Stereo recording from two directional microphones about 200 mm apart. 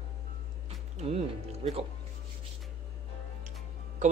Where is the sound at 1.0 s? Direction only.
30° right (ahead or behind).